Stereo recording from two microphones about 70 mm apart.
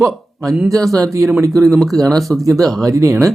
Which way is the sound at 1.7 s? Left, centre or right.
Centre.